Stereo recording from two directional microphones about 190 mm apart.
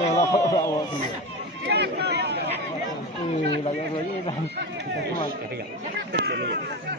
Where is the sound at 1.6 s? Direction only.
60° right (ahead or behind).